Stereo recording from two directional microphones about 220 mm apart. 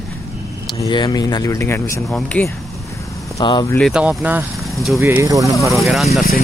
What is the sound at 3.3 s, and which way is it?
Speech, 15° left (ahead or behind).